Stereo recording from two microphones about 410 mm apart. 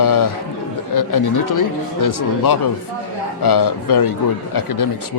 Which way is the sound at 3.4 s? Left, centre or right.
Left.